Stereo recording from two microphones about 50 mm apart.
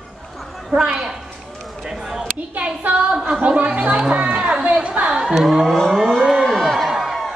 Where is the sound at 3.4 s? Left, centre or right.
Right.